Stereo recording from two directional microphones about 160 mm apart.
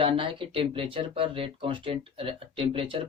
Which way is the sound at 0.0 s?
30° right (ahead or behind).